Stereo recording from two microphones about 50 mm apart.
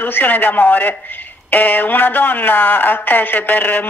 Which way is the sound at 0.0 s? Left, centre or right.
Left.